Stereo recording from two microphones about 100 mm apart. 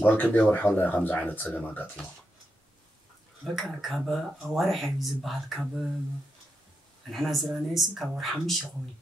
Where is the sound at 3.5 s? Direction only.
Centre (ahead or behind).